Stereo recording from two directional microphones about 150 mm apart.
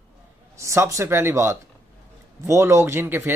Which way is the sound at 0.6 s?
20° right (ahead or behind).